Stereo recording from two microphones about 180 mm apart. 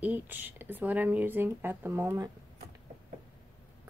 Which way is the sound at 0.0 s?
10° right (ahead or behind).